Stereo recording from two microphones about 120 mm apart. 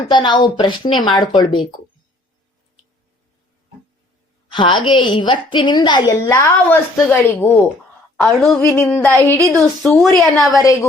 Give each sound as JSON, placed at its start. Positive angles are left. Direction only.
{"t": 0.0, "sound": "speech", "side_deg": 40}
{"t": 4.5, "sound": "speech", "side_deg": 40}
{"t": 6.2, "sound": "music", "side_deg": 20}
{"t": 7.1, "sound": "a woman's voice", "side_deg": 15}
{"t": 8.4, "sound": "music", "side_deg": 25}
{"t": 9.6, "sound": "speech", "side_deg": 0}
{"t": 10.5, "sound": "music", "side_deg": 25}